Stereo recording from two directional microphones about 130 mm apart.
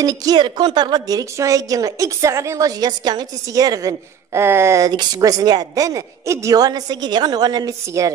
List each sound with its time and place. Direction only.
0.0 s a woman's voice: 30° right (ahead or behind)